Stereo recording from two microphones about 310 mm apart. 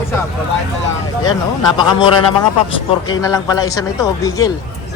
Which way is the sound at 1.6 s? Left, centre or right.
Centre.